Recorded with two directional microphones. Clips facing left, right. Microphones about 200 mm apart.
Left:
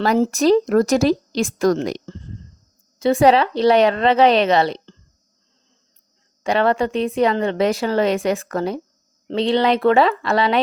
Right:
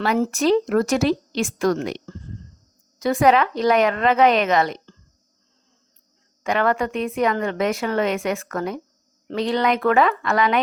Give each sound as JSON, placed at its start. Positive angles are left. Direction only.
{"t": 0.0, "sound": "speech", "side_deg": 40}
{"t": 3.0, "sound": "speech", "side_deg": 30}
{"t": 6.4, "sound": "a woman's voice", "side_deg": 30}